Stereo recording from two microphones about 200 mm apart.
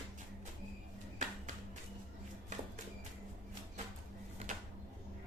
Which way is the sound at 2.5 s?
40° right (ahead or behind).